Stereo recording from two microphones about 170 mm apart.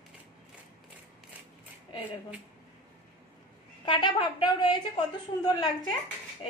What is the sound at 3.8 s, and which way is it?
A woman's voice, 30° left (ahead or behind).